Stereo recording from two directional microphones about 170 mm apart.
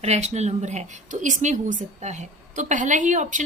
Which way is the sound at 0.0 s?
40° right (ahead or behind).